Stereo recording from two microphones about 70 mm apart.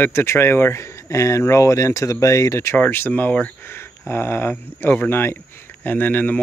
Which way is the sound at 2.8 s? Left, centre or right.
Left.